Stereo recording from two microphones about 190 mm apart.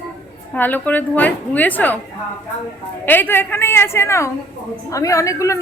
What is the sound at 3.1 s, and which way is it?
A woman's voice, 10° left (ahead or behind).